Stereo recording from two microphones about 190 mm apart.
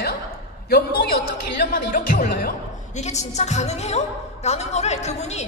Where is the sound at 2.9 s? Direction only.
35° left (ahead or behind).